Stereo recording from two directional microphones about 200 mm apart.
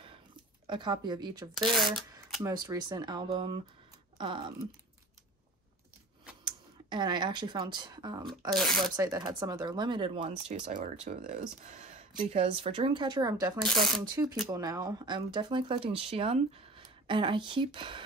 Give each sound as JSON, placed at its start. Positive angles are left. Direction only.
{"t": 0.7, "sound": "speech", "side_deg": -20}
{"t": 1.7, "sound": "speech", "side_deg": 0}
{"t": 2.4, "sound": "speech", "side_deg": -20}
{"t": 6.4, "sound": "speech", "side_deg": -20}
{"t": 8.5, "sound": "speech", "side_deg": 0}
{"t": 8.9, "sound": "speech", "side_deg": -20}
{"t": 10.5, "sound": "speech", "side_deg": -40}
{"t": 13.7, "sound": "speech", "side_deg": 0}
{"t": 14.5, "sound": "speech", "side_deg": -20}